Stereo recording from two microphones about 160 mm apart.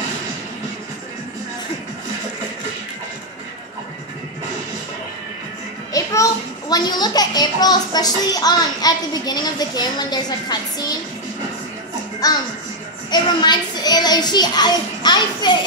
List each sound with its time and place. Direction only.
5.9 s a child's voice: 20° left (ahead or behind)
12.2 s music: 25° left (ahead or behind)
13.1 s a child's voice: 25° left (ahead or behind)